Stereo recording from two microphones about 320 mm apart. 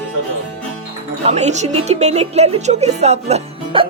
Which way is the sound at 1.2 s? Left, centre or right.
Centre.